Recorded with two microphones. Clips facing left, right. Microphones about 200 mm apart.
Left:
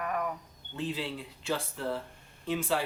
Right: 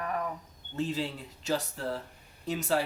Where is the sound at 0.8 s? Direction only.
40° right (ahead or behind).